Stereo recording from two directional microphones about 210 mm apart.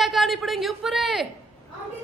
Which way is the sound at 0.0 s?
Centre (ahead or behind).